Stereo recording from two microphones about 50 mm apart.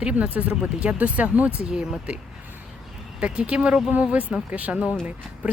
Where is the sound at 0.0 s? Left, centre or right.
Right.